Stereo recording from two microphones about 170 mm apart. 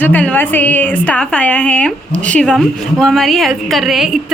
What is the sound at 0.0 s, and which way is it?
A woman's voice, 10° left (ahead or behind).